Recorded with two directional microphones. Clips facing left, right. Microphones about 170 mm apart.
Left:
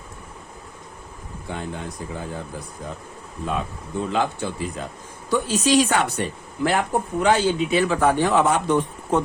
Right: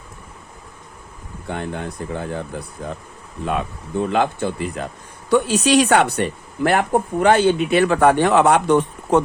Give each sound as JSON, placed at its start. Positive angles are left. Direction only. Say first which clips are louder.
{"t": 1.5, "sound": "speech", "louder": "right 4 dB", "side_deg": -60}
{"t": 4.0, "sound": "speech", "louder": "right 4 dB", "side_deg": -60}